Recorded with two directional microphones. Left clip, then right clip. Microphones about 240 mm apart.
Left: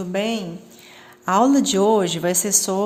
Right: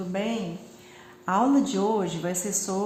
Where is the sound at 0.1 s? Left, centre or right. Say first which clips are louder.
Left 6 dB; left.